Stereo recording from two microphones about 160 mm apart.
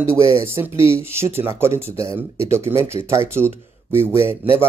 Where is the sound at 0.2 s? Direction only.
20° right (ahead or behind).